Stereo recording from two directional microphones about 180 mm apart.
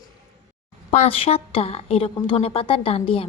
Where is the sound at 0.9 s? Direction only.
35° left (ahead or behind).